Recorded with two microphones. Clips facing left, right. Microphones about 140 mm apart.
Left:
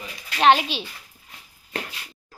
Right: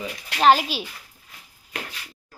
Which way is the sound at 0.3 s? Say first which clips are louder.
Even; centre (ahead or behind).